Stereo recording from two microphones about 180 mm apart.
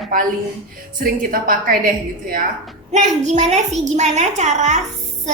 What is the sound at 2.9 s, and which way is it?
A woman's voice, 40° right (ahead or behind).